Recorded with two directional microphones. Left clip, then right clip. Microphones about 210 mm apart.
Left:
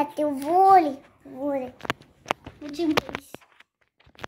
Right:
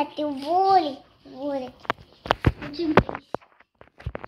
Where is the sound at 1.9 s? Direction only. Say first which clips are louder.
Right 7 dB; 45° left (ahead or behind).